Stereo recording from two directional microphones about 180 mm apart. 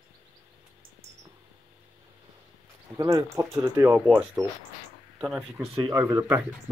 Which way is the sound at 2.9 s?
15° right (ahead or behind).